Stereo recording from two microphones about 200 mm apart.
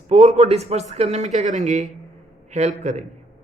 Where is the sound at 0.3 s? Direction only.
30° right (ahead or behind).